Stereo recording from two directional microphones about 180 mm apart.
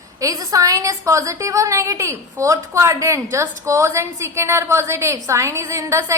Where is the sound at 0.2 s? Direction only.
20° right (ahead or behind).